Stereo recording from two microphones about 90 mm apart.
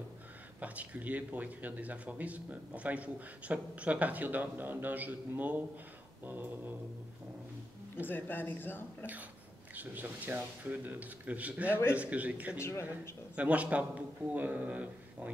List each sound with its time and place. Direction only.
0.6 s speech: 15° right (ahead or behind)
6.2 s a sound: 20° right (ahead or behind)
8.1 s a man's voice: 20° left (ahead or behind)
9.8 s speech: 20° right (ahead or behind)
11.7 s a man's voice: 25° left (ahead or behind)
12.0 s speech: 15° right (ahead or behind)
12.5 s speech: 30° left (ahead or behind)
13.4 s speech: 15° right (ahead or behind)